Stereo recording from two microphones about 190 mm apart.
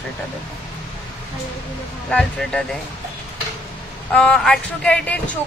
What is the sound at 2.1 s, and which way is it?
Speech, 5° left (ahead or behind).